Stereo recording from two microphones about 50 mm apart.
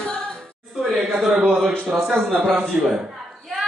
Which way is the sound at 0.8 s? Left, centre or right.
Centre.